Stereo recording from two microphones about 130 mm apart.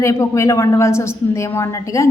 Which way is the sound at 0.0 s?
25° left (ahead or behind).